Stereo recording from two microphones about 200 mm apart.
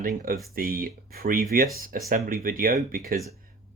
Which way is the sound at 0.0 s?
45° right (ahead or behind).